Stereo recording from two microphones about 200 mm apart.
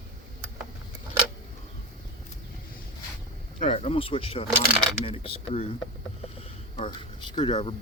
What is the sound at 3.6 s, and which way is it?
Speech, 30° left (ahead or behind).